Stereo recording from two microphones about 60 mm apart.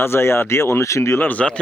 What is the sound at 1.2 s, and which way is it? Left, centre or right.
Speech, left.